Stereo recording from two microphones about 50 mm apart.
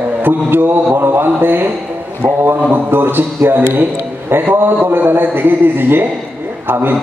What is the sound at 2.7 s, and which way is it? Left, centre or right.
A man's voice, right.